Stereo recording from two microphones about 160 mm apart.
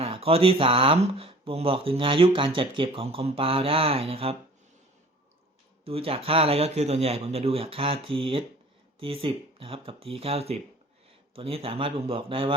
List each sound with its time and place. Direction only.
0.0 s speech: 35° right (ahead or behind)
5.8 s speech: 35° right (ahead or behind)